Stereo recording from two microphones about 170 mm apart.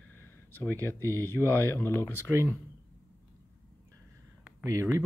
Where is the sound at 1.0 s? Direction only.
20° right (ahead or behind).